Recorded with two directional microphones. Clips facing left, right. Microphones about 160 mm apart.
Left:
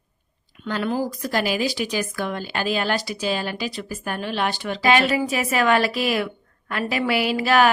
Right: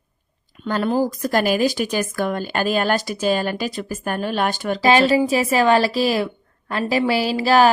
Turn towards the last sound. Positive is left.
turn(degrees=-30)  # may be behind; listen again after turning